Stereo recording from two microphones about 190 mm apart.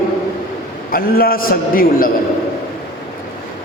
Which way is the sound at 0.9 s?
50° left (ahead or behind).